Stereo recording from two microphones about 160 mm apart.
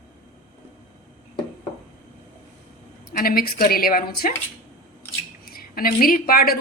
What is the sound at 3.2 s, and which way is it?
A woman's voice, 65° left (ahead or behind).